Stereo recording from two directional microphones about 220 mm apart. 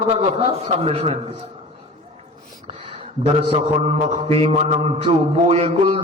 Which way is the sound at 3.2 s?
30° right (ahead or behind).